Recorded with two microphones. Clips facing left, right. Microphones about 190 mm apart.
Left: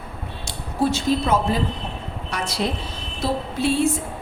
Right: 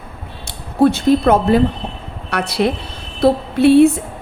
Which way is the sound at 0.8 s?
60° right (ahead or behind).